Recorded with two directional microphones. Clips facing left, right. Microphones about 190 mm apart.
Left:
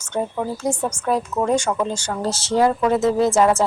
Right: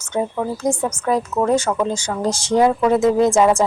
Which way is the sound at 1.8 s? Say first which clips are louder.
Right 3 dB; 10° right (ahead or behind).